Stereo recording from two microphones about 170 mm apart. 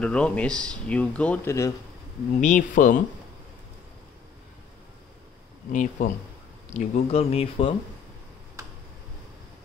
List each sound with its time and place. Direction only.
0.0 s speech: 5° left (ahead or behind)
2.4 s speech: 50° left (ahead or behind)
5.7 s speech: 50° left (ahead or behind)